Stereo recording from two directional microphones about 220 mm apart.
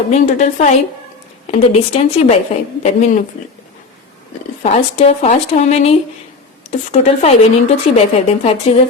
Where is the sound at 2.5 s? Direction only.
25° left (ahead or behind).